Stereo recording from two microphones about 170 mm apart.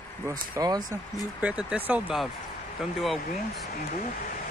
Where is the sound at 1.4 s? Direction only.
5° right (ahead or behind).